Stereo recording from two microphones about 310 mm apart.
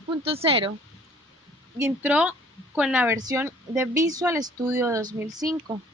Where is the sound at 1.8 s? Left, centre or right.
Centre.